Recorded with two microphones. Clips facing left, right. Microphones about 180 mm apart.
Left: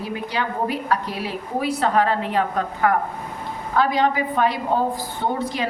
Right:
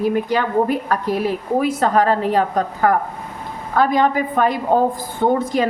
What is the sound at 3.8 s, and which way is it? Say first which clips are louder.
Speech: right 3 dB; 50° right (ahead or behind).